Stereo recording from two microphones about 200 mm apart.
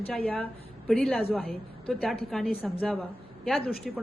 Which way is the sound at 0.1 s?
5° left (ahead or behind).